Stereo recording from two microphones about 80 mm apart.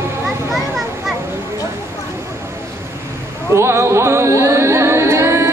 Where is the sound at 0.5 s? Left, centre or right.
Centre.